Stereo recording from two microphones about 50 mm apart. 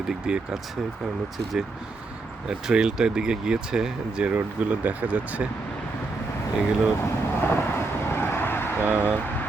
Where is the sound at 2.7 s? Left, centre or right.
Centre.